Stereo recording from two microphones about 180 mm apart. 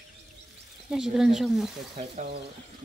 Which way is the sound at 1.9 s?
40° right (ahead or behind).